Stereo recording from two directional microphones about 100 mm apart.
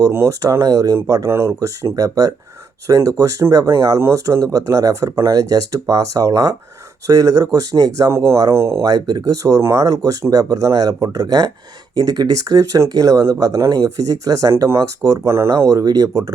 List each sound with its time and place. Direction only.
0.0 s speech: 30° right (ahead or behind)
8.9 s speech: 40° right (ahead or behind)